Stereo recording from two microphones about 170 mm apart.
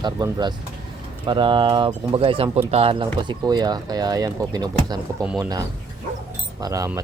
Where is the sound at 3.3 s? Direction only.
25° right (ahead or behind).